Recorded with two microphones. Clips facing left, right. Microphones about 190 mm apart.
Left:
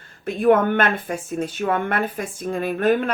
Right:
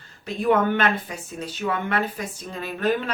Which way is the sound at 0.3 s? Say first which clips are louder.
Left 4 dB; 55° left (ahead or behind).